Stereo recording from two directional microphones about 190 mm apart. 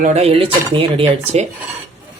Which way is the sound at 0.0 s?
35° right (ahead or behind).